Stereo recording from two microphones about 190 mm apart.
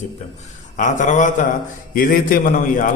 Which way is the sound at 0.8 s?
40° left (ahead or behind).